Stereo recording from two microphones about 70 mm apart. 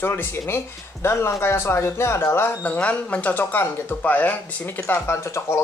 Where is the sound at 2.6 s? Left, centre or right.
Left.